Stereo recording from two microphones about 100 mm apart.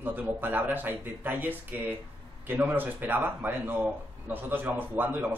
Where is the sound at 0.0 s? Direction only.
20° right (ahead or behind).